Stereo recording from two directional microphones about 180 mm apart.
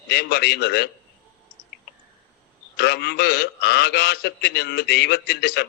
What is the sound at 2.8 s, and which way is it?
A man's voice, 65° left (ahead or behind).